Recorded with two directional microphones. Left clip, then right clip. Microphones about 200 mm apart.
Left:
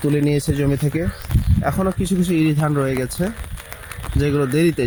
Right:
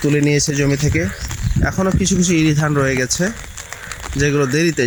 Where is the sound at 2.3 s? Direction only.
5° left (ahead or behind).